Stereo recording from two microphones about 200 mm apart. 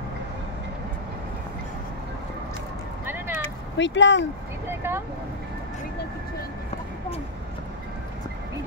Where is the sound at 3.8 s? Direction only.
65° left (ahead or behind).